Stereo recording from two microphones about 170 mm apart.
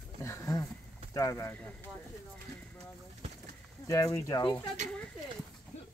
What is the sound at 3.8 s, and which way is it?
Speech, 20° left (ahead or behind).